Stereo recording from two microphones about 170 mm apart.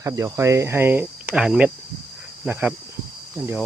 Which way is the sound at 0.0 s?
20° right (ahead or behind).